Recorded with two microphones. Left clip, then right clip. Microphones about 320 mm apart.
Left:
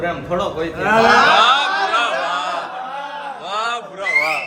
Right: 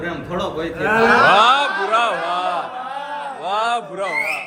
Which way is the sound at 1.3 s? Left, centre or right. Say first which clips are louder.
Even; centre.